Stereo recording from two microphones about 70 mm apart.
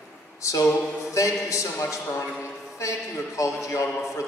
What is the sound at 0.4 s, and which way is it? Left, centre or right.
A man's voice, left.